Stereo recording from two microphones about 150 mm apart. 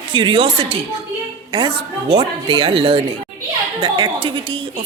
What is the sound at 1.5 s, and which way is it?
A woman's voice, 35° right (ahead or behind).